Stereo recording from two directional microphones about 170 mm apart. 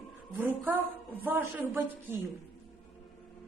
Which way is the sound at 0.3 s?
10° right (ahead or behind).